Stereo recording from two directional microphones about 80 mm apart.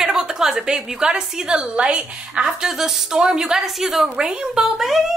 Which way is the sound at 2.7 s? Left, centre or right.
Centre.